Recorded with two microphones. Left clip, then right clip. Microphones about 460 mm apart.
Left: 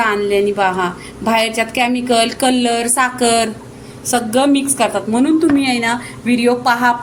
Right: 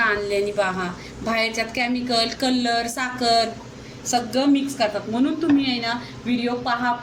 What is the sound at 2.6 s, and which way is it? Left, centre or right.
Speech, centre.